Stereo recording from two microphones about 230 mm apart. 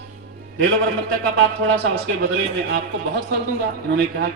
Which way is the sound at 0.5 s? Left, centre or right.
Right.